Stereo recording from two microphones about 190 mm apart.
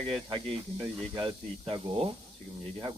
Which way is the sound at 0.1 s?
30° right (ahead or behind).